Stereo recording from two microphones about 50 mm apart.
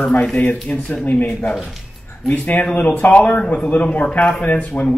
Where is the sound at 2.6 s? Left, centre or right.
Centre.